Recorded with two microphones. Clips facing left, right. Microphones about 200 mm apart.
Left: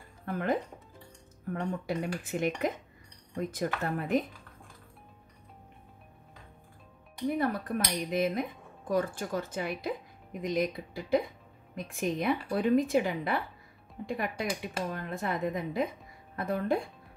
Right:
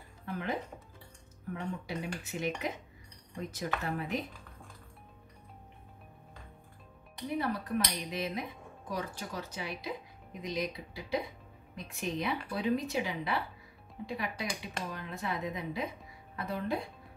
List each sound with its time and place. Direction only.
0.2 s speech: 50° left (ahead or behind)
7.3 s speech: 50° left (ahead or behind)